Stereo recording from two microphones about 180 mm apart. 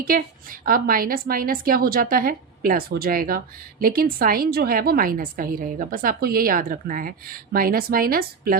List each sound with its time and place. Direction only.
0.1 s a woman's voice: 55° right (ahead or behind)